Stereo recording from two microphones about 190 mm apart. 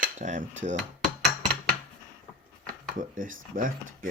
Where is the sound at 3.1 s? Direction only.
45° right (ahead or behind).